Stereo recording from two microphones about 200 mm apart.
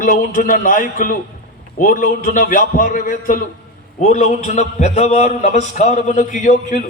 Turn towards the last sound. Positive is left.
turn(degrees=40)  # may be behind; listen again after turning